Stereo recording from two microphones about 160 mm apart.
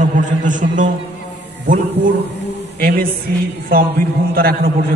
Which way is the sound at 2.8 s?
70° right (ahead or behind).